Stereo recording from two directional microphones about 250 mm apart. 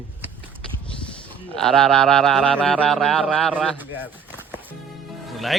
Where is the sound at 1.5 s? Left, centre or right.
Centre.